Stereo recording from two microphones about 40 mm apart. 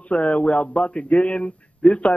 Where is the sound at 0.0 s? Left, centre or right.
Left.